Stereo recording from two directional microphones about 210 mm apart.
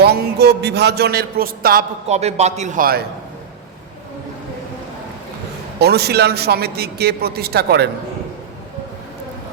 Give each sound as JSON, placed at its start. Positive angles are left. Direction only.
{"t": 0.0, "sound": "a man's voice", "side_deg": -50}
{"t": 2.0, "sound": "a man's voice", "side_deg": -30}
{"t": 5.8, "sound": "a man's voice", "side_deg": -50}